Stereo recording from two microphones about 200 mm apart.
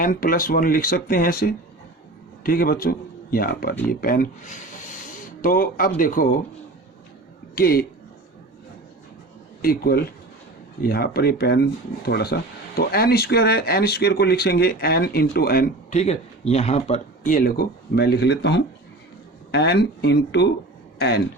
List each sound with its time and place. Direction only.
0.0 s a man's voice: 45° left (ahead or behind)
7.5 s speech: 50° left (ahead or behind)
9.6 s speech: 50° left (ahead or behind)